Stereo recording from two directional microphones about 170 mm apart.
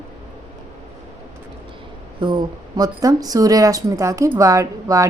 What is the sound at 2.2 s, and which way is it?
Speech, 25° right (ahead or behind).